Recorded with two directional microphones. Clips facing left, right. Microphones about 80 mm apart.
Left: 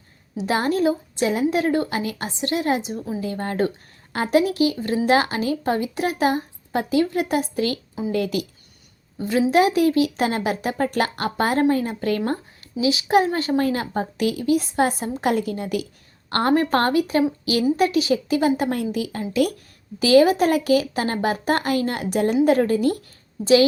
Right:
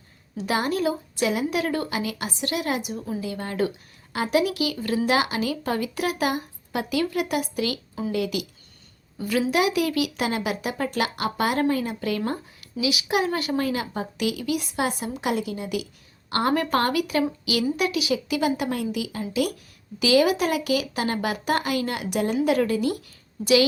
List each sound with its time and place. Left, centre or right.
0.4 s a woman's voice: left
3.2 s speech: left
9.1 s a woman's voice: left